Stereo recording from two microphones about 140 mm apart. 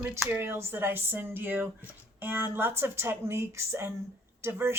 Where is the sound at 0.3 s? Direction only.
15° right (ahead or behind).